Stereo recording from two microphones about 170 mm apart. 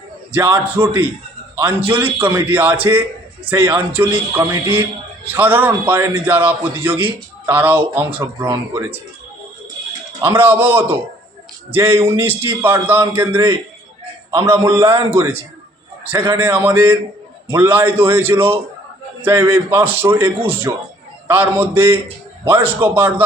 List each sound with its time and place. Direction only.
0.3 s a man's voice: 10° right (ahead or behind)
10.1 s a man's voice: 20° right (ahead or behind)